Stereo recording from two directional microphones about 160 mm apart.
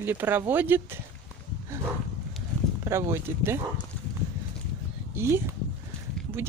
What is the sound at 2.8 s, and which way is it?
Speech, 15° right (ahead or behind).